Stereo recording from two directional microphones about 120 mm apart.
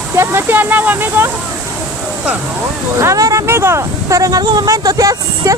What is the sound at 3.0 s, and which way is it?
Speech, 25° right (ahead or behind).